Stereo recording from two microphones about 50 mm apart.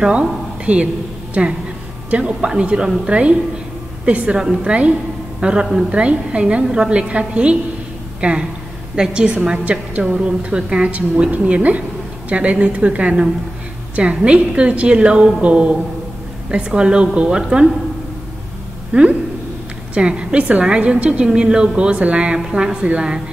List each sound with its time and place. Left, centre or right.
0.0 s a woman's voice: right
18.9 s a woman's voice: right